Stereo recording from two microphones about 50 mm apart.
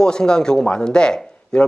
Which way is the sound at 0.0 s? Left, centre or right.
Centre.